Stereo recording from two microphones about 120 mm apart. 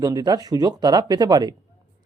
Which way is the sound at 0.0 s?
35° right (ahead or behind).